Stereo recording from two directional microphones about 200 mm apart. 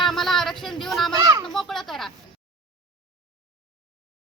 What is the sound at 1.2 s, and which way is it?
Speech, 20° right (ahead or behind).